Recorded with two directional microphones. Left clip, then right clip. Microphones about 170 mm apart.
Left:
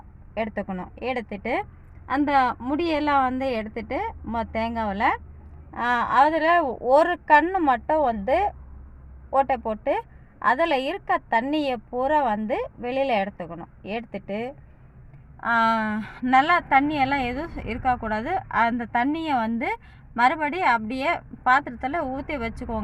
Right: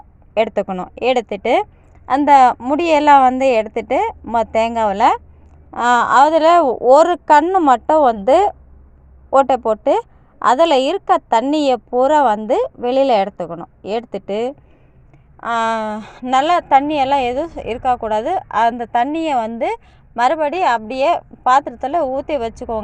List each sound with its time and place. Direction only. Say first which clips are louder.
0.3 s a woman's voice: right 12 dB; 50° right (ahead or behind)
15.4 s a woman's voice: right 3 dB; 40° right (ahead or behind)